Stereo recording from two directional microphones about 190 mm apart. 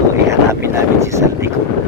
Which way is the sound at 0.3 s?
15° right (ahead or behind).